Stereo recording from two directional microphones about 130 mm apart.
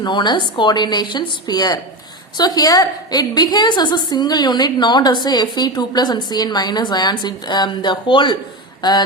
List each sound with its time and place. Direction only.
0.0 s a woman's voice: 35° left (ahead or behind)